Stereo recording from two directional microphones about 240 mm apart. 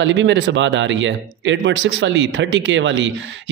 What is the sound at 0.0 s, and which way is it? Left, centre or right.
Speech, right.